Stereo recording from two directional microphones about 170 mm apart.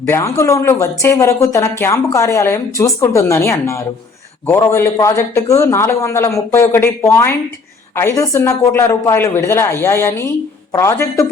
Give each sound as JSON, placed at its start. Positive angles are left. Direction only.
{"t": 0.2, "sound": "speech", "side_deg": 20}